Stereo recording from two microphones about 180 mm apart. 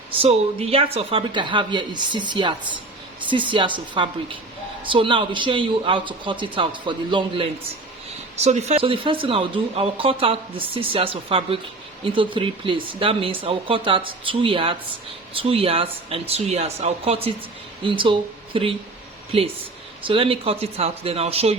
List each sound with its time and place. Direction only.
0.2 s speech: 35° right (ahead or behind)